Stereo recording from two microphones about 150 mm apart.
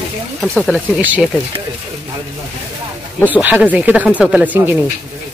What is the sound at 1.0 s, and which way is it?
Speech, 10° right (ahead or behind).